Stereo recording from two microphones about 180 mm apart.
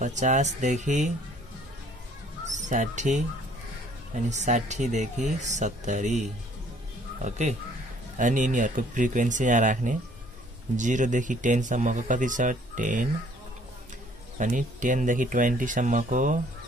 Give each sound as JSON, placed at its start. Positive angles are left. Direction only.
{"t": 0.0, "sound": "speech", "side_deg": -40}
{"t": 2.4, "sound": "speech", "side_deg": -40}
{"t": 7.2, "sound": "speech", "side_deg": -40}
{"t": 14.4, "sound": "speech", "side_deg": -45}